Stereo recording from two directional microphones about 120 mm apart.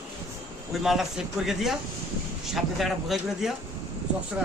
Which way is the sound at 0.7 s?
5° right (ahead or behind).